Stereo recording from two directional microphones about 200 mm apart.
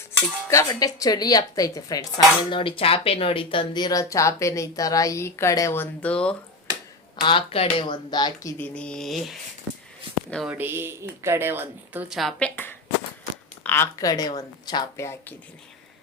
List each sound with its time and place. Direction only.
0.5 s speech: 20° left (ahead or behind)
7.2 s speech: 25° left (ahead or behind)
8.5 s a woman's voice: 5° left (ahead or behind)